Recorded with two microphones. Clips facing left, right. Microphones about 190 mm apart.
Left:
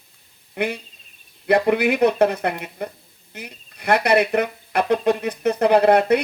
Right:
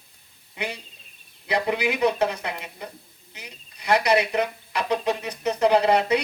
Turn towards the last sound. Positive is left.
turn(degrees=55)  # may be behind; listen again after turning